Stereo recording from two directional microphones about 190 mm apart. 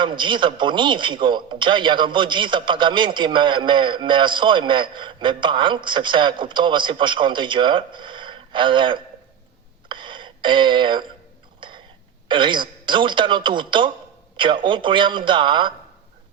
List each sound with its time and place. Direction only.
0.0 s a man's voice: 25° right (ahead or behind)
11.6 s a sound: 25° right (ahead or behind)
12.3 s a man's voice: 25° right (ahead or behind)